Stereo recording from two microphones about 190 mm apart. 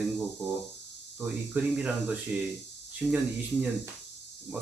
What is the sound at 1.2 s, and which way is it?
Speech, 5° right (ahead or behind).